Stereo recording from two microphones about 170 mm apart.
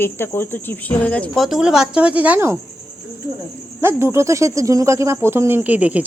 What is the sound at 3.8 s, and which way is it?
Speech, 15° right (ahead or behind).